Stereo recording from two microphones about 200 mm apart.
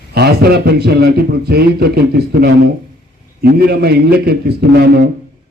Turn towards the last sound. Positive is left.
turn(degrees=-50)  # may be behind; listen again after turning